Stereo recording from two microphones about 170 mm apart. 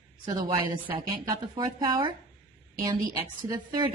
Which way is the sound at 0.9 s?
25° right (ahead or behind).